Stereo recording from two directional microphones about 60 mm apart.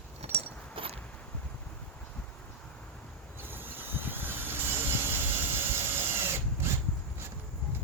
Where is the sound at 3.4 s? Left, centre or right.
Right.